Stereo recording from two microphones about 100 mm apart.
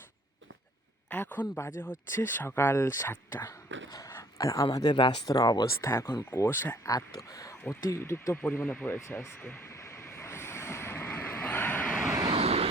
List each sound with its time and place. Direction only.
1.1 s speech: 15° left (ahead or behind); by 5.9 s 40° left (ahead or behind)
5.9 s speech: 25° left (ahead or behind)
6.8 s speech: 35° left (ahead or behind)
9.2 s vehicle: 20° left (ahead or behind)
12.3 s vehicle: 80° right